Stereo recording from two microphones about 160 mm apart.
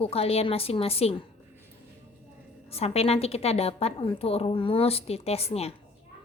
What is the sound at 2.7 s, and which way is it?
A child's voice, 40° left (ahead or behind).